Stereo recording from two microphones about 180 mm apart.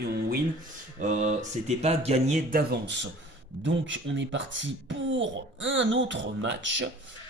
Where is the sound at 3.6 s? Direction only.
90° right.